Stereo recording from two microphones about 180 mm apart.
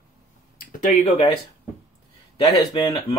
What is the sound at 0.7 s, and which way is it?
Speech, 45° left (ahead or behind).